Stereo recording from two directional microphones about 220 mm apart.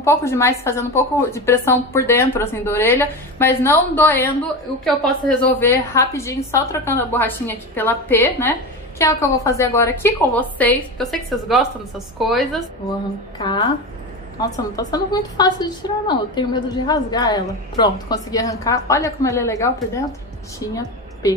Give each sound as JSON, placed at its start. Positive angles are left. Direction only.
{"t": 0.0, "sound": "a woman's voice", "side_deg": 10}
{"t": 13.4, "sound": "a woman's voice", "side_deg": 20}